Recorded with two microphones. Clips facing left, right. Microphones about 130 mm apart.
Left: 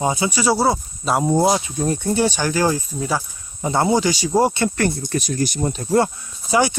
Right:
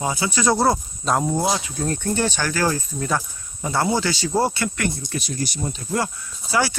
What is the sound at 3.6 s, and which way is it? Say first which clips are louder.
Speech: left 4 dB; 20° left (ahead or behind).